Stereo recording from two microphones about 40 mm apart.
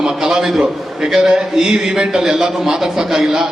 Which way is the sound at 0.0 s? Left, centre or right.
Centre.